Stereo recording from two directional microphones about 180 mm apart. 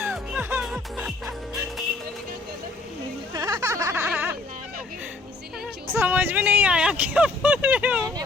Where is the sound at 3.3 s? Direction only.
20° right (ahead or behind).